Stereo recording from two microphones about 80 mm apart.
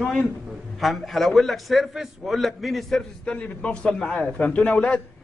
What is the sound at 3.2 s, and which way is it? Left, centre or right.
A man's voice, centre.